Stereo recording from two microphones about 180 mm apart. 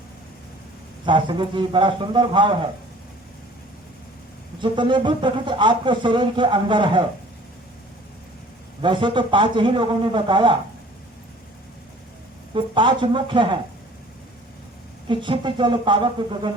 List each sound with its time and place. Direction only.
1.0 s speech: 25° right (ahead or behind)
4.6 s speech: 25° right (ahead or behind)
8.8 s speech: 25° right (ahead or behind)
12.5 s speech: 25° right (ahead or behind)
15.0 s speech: 25° right (ahead or behind)